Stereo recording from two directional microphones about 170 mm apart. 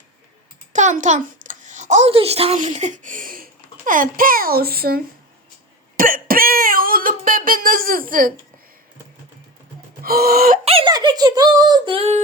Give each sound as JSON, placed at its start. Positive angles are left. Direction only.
{"t": 0.7, "sound": "a child's voice", "side_deg": -45}
{"t": 6.0, "sound": "speech", "side_deg": -55}
{"t": 10.0, "sound": "gasp", "side_deg": -60}
{"t": 10.7, "sound": "speech", "side_deg": -30}